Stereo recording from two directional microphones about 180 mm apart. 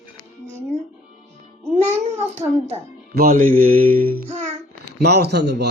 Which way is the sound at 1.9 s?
15° right (ahead or behind).